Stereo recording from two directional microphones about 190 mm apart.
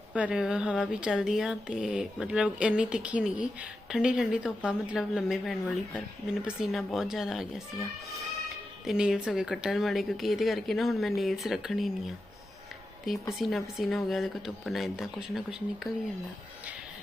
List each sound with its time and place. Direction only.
0.1 s speech: 5° right (ahead or behind)
6.6 s speech: centre (ahead or behind)
8.9 s speech: 5° right (ahead or behind)